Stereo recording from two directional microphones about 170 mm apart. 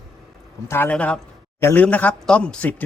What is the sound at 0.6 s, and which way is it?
A man's voice, 10° left (ahead or behind).